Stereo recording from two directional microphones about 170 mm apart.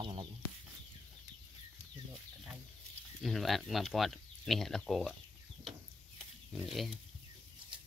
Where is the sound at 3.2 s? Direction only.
Centre (ahead or behind).